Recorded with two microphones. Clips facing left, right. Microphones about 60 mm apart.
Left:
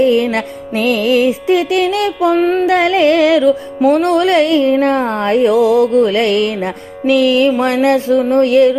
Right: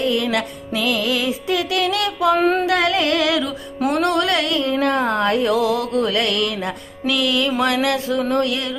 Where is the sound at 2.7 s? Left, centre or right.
Left.